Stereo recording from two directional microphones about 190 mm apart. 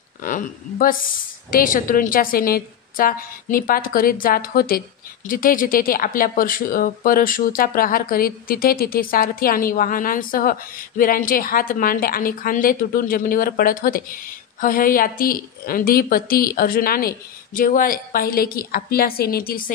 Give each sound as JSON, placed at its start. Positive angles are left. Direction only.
{"t": 0.2, "sound": "speech", "side_deg": 45}